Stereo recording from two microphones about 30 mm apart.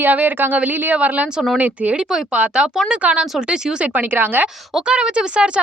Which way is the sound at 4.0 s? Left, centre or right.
Right.